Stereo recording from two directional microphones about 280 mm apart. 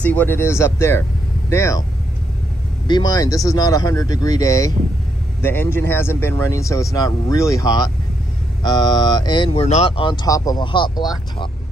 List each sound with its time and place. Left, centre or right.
0.0 s speech: centre
2.9 s speech: centre